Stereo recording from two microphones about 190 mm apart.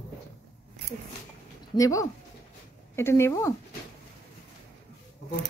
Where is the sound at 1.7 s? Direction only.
15° left (ahead or behind).